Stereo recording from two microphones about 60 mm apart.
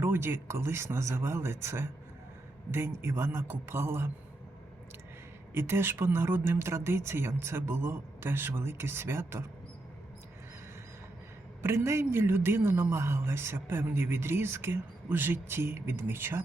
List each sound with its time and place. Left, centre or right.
0.0 s speech: right
3.0 s speech: right
5.5 s speech: right
11.6 s speech: right